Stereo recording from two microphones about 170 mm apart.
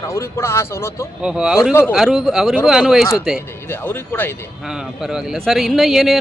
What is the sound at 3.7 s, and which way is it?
Speech, 10° left (ahead or behind).